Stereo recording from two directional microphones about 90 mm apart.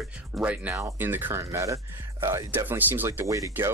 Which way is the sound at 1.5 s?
35° right (ahead or behind).